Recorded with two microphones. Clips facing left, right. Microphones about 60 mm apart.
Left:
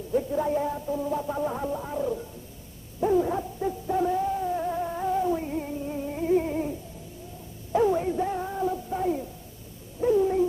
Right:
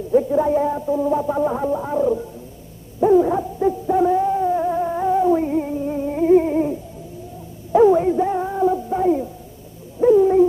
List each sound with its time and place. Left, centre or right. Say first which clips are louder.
0.1 s a sound: right 9 dB; right
3.0 s hoot: right 9 dB; centre
7.7 s music: right 10 dB; centre
10.0 s dog: right 9 dB; centre